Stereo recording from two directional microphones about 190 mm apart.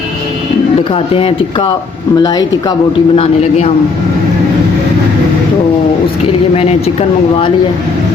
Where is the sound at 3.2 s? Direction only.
35° left (ahead or behind).